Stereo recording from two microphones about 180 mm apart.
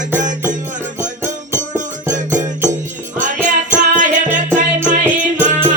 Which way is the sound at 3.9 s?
45° right (ahead or behind).